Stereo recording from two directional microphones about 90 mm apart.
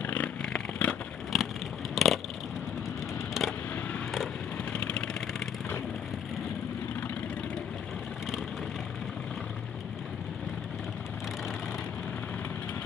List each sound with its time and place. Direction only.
0.0 s vehicle: 15° left (ahead or behind)
1.3 s vehicle: centre (ahead or behind)
2.0 s a sound: centre (ahead or behind)
3.4 s vehicle: centre (ahead or behind)
4.7 s vehicle: 10° left (ahead or behind)